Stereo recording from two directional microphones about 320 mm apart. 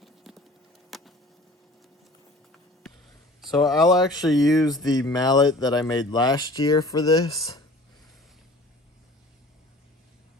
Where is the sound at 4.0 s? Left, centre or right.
Centre.